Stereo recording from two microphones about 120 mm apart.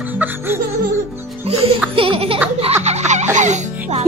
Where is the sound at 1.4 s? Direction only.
55° right (ahead or behind).